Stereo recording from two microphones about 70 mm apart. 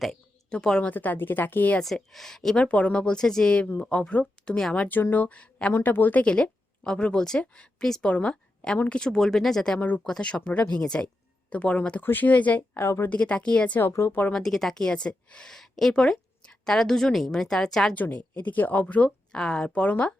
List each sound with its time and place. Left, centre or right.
0.5 s speech: centre
0.9 s speech: left
1.8 s speech: centre
2.6 s speech: centre
5.7 s a woman's voice: left
13.9 s speech: left
14.3 s speech: centre
17.9 s speech: left
19.3 s speech: centre